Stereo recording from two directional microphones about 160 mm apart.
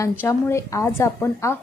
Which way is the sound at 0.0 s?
15° left (ahead or behind).